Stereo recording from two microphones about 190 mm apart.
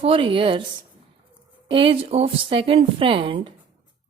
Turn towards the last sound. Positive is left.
turn(degrees=-30)  # may be behind; listen again after turning